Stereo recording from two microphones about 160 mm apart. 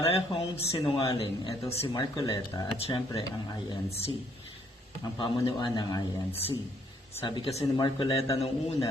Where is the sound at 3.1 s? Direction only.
25° left (ahead or behind).